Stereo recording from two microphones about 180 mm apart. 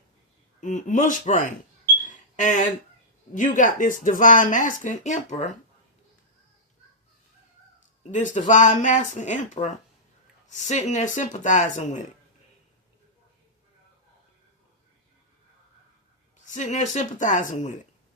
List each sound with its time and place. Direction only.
0.6 s speech: 45° left (ahead or behind)
2.0 s a sound: 45° left (ahead or behind)
3.3 s speech: 45° left (ahead or behind)
8.1 s speech: 45° left (ahead or behind)
16.5 s speech: 40° left (ahead or behind)